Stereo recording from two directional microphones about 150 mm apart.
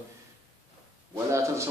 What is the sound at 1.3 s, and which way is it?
Speech, 20° right (ahead or behind).